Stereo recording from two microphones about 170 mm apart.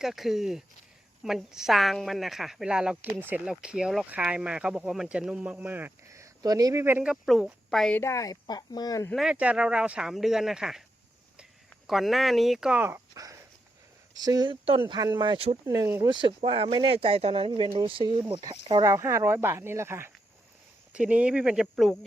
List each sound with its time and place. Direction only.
0.0 s a woman's voice: centre (ahead or behind)
7.9 s speech: 15° left (ahead or behind)
9.0 s a woman's voice: centre (ahead or behind)